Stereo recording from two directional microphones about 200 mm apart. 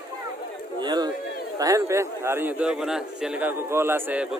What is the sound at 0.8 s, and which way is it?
Speech, 20° right (ahead or behind).